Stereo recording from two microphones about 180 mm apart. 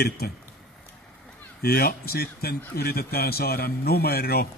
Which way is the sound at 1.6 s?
55° left (ahead or behind).